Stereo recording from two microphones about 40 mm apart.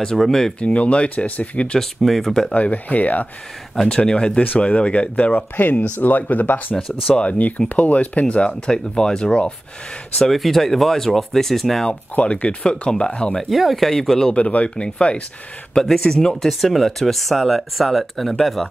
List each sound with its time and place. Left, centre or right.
0.2 s speech: centre
0.6 s speech: left
1.8 s speech: centre
2.5 s speech: left
3.9 s speech: left
5.1 s speech: left
7.1 s speech: left
10.3 s speech: centre
12.2 s speech: left
13.4 s speech: centre
14.3 s speech: left
15.9 s speech: centre